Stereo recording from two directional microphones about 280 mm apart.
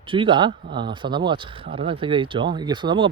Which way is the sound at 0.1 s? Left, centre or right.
Centre.